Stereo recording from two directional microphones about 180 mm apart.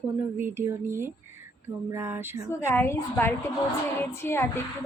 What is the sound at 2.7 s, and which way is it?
A woman's voice, 15° left (ahead or behind).